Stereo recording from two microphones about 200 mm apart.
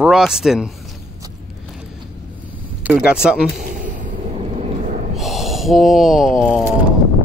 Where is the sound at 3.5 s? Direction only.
40° right (ahead or behind).